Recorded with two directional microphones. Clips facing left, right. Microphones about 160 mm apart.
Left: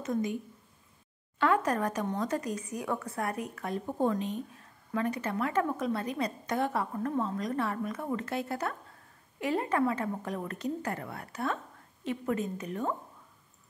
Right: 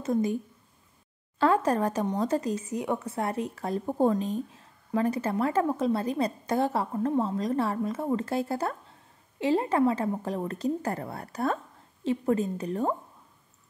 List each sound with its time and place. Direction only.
0.0 s a woman's voice: 35° right (ahead or behind)
1.4 s a woman's voice: 30° right (ahead or behind)